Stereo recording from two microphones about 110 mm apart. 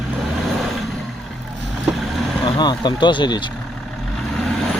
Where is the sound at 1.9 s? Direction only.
Centre (ahead or behind).